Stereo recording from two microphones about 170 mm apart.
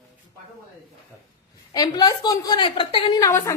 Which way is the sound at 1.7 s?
25° left (ahead or behind).